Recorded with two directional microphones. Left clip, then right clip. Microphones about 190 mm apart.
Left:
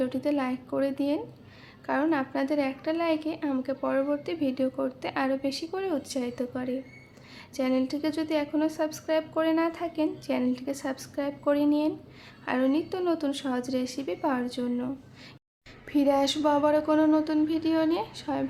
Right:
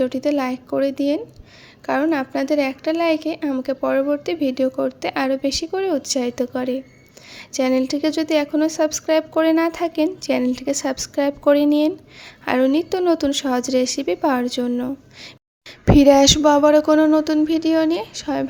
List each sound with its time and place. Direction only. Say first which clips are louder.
0.0 s a woman's voice: right 8 dB; 30° right (ahead or behind)